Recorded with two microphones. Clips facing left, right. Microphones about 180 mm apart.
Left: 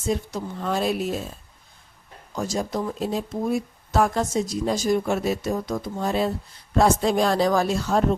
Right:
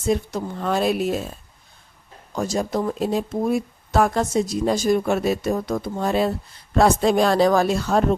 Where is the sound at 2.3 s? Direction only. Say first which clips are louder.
Right 3 dB; 60° right (ahead or behind).